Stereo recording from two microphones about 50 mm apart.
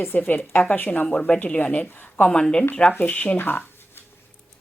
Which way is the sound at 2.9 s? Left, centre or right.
Left.